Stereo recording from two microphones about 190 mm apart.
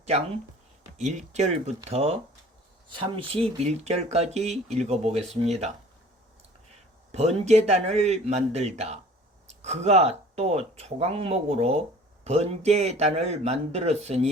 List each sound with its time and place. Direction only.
0.9 s speech: 40° right (ahead or behind)
7.4 s speech: 35° right (ahead or behind)